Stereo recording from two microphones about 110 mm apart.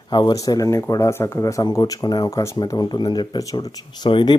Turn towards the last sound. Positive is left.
turn(degrees=45)  # may be behind; listen again after turning